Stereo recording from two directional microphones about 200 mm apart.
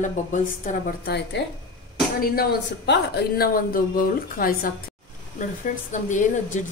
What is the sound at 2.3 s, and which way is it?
A woman's voice, 55° left (ahead or behind).